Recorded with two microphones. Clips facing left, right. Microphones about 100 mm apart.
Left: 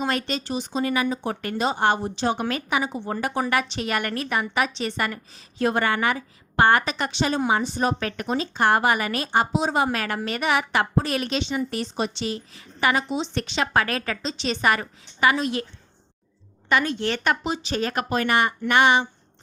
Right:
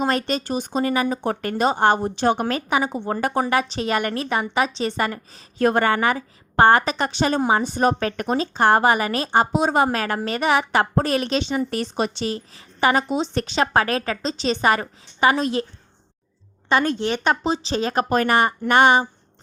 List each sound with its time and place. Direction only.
0.0 s speech: 40° right (ahead or behind)
2.5 s a woman's voice: 35° right (ahead or behind)
2.8 s speech: 50° right (ahead or behind)
3.4 s a woman's voice: 30° right (ahead or behind)
5.5 s a woman's voice: 50° right (ahead or behind)
9.9 s a woman's voice: 35° right (ahead or behind)
17.0 s a woman's voice: 20° right (ahead or behind)
17.4 s a woman's voice: 30° right (ahead or behind)
18.1 s a woman's voice: 40° right (ahead or behind)